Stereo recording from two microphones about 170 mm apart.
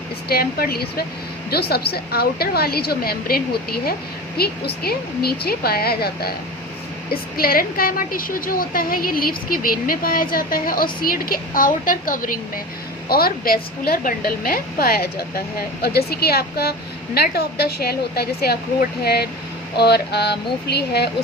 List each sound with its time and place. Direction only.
0.3 s a woman's voice: 65° left (ahead or behind)